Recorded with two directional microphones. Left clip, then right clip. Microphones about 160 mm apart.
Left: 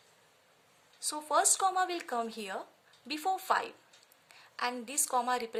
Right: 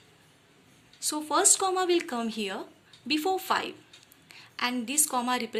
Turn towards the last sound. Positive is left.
turn(degrees=45)  # may be behind; listen again after turning